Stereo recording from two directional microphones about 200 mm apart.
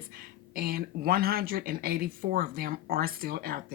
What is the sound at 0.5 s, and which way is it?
Speech, 45° right (ahead or behind).